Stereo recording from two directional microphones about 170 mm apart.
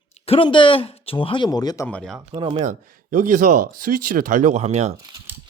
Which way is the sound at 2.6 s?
50° right (ahead or behind).